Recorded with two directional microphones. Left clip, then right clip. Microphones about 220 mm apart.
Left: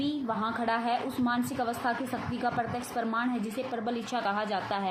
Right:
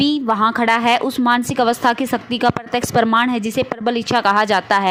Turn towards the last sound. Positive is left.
turn(degrees=-50)  # may be behind; listen again after turning